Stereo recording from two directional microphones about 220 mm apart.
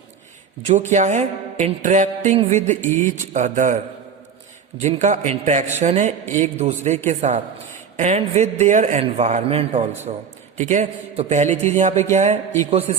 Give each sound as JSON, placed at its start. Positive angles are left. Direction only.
{"t": 0.7, "sound": "music", "side_deg": -35}
{"t": 2.8, "sound": "speech", "side_deg": 10}
{"t": 3.3, "sound": "music", "side_deg": -35}
{"t": 4.8, "sound": "music", "side_deg": -30}
{"t": 12.9, "sound": "speech", "side_deg": -30}